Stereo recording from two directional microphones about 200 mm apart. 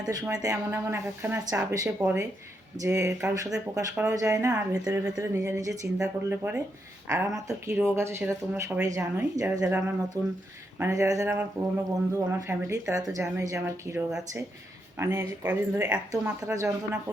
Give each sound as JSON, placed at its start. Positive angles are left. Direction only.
{"t": 0.0, "sound": "speech", "side_deg": -20}